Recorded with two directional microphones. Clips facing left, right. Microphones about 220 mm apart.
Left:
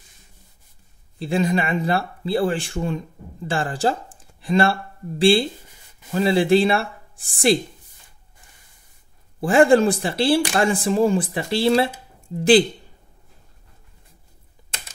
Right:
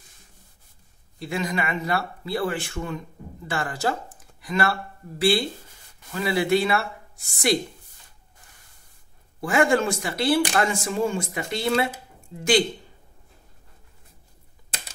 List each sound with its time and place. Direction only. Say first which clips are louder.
1.2 s speech: left 6 dB; 30° left (ahead or behind)
9.4 s speech: left 6 dB; 30° left (ahead or behind)